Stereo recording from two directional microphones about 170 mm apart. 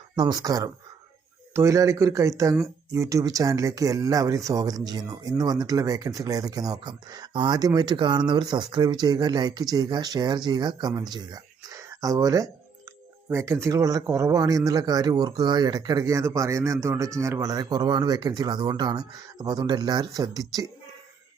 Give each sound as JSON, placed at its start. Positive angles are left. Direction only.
{"t": 0.2, "sound": "speech", "side_deg": -25}